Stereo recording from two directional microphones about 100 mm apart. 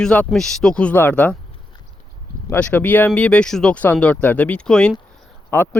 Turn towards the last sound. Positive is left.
turn(degrees=20)  # may be behind; listen again after turning